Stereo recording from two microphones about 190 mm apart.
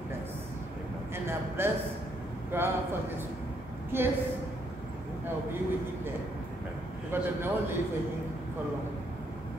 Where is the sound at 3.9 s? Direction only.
10° right (ahead or behind).